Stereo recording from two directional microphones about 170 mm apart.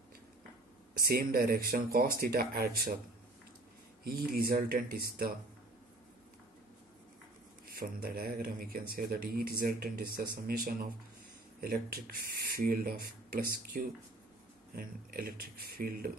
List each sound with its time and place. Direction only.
0.9 s speech: 60° right (ahead or behind)
4.0 s speech: 60° right (ahead or behind)
7.6 s speech: 60° right (ahead or behind)